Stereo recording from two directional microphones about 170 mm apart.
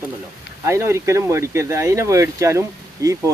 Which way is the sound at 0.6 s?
15° right (ahead or behind).